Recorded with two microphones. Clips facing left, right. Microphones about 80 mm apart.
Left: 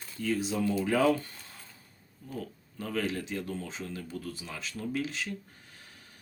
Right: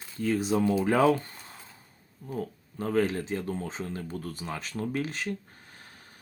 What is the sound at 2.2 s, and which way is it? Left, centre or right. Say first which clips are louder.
Speech: right 5 dB; right.